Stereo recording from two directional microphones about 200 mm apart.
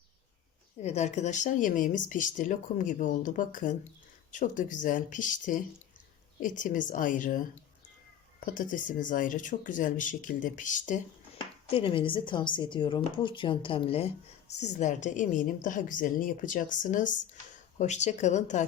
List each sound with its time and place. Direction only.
0.8 s speech: 35° left (ahead or behind)
8.5 s speech: 40° left (ahead or behind)
11.7 s a woman's voice: 25° left (ahead or behind)
14.4 s speech: 60° left (ahead or behind)
14.8 s speech: 35° left (ahead or behind)